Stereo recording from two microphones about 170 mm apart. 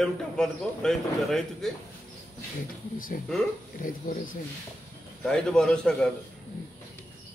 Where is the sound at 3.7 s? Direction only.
50° left (ahead or behind).